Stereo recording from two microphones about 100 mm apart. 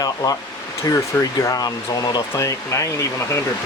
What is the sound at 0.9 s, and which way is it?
Speech, 40° left (ahead or behind).